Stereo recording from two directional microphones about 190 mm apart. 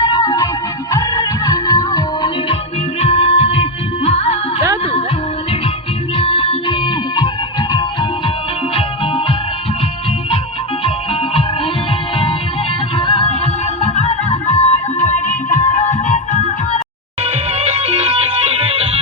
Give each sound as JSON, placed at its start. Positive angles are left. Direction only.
{"t": 0.0, "sound": "music", "side_deg": 20}
{"t": 6.1, "sound": "music", "side_deg": 25}
{"t": 10.8, "sound": "music", "side_deg": 30}
{"t": 13.0, "sound": "music", "side_deg": 30}
{"t": 17.2, "sound": "music", "side_deg": -30}